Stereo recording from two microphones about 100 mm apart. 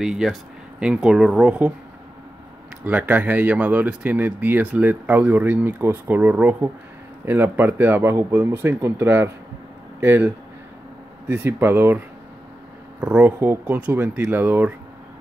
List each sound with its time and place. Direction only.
0.0 s speech: 5° right (ahead or behind)
2.8 s speech: 15° right (ahead or behind)
13.0 s speech: 15° right (ahead or behind)